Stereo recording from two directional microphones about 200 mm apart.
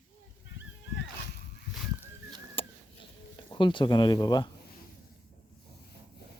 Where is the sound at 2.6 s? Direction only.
25° left (ahead or behind).